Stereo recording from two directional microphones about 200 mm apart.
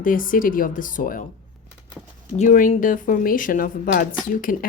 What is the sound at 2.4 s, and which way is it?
A woman's voice, 40° left (ahead or behind).